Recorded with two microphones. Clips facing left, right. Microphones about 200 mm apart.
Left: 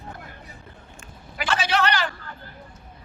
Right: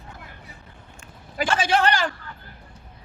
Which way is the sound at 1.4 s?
50° right (ahead or behind).